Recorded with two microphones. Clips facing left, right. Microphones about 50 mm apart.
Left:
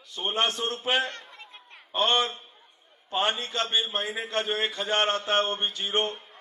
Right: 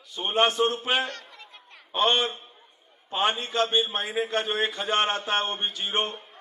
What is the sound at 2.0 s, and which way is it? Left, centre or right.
A man's voice, centre.